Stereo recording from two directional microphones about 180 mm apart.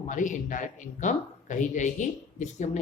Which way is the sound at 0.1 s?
45° left (ahead or behind).